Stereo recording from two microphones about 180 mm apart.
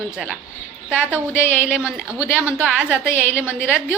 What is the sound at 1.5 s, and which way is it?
A woman's voice, 5° right (ahead or behind).